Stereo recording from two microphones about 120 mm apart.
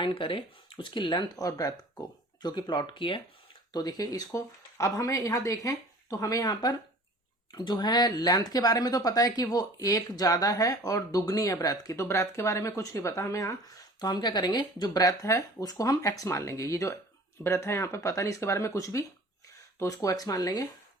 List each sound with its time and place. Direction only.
0.0 s speech: 45° left (ahead or behind); by 20.7 s 30° left (ahead or behind)